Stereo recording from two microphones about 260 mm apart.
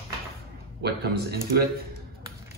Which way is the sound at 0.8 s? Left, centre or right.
Right.